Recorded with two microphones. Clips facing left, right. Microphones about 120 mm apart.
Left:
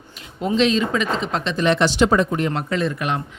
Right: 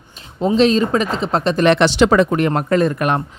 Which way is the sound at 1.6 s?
70° right (ahead or behind).